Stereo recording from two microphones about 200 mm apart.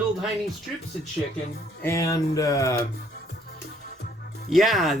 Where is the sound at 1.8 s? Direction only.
15° left (ahead or behind).